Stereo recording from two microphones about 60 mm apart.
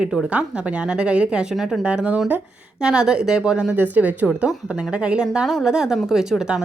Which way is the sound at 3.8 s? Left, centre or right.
Right.